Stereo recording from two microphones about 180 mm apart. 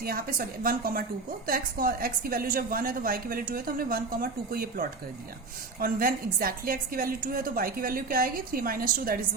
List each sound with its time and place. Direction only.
0.0 s a woman's voice: 55° right (ahead or behind)